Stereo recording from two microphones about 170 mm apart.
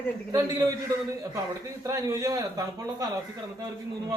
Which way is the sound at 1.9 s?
20° right (ahead or behind).